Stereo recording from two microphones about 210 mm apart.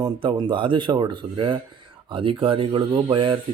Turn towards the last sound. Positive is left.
turn(degrees=-25)  # may be behind; listen again after turning